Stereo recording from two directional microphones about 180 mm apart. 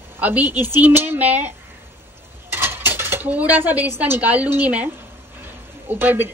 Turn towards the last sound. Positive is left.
turn(degrees=-10)  # may be behind; listen again after turning